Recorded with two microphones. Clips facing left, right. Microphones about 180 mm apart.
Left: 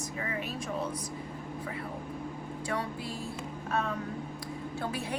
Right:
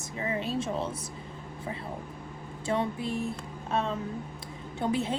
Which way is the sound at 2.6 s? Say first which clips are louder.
Right 6 dB; 25° right (ahead or behind).